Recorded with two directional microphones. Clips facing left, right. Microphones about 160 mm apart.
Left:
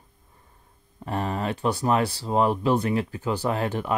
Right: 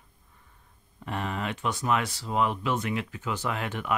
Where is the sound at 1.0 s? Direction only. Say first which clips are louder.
Left 4 dB; 40° left (ahead or behind).